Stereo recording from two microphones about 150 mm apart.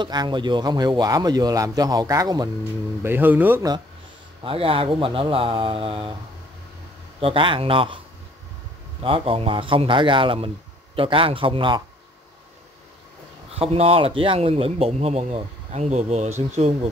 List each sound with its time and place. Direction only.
0.0 s speech: 30° right (ahead or behind)
3.0 s speech: 15° right (ahead or behind)
4.4 s speech: 35° right (ahead or behind)
7.2 s speech: 35° right (ahead or behind)
9.0 s speech: 40° right (ahead or behind)
13.6 s speech: 40° right (ahead or behind)